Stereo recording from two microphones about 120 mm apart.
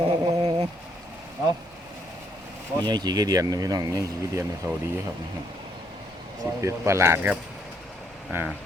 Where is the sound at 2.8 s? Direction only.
35° right (ahead or behind).